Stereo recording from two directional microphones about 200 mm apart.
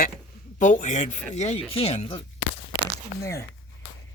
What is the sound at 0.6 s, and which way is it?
Speech, 40° left (ahead or behind).